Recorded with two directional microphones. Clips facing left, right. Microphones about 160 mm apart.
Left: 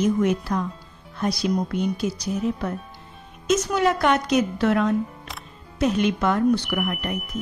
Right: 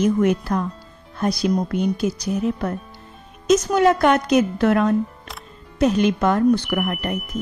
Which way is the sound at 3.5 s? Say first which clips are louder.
Right 5 dB; 45° right (ahead or behind).